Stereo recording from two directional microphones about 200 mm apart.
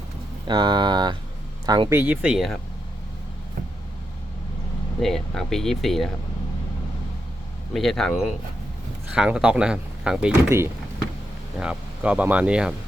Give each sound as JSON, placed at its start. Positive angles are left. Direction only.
{"t": 0.4, "sound": "speech", "side_deg": -20}
{"t": 4.9, "sound": "speech", "side_deg": 0}
{"t": 7.7, "sound": "speech", "side_deg": 0}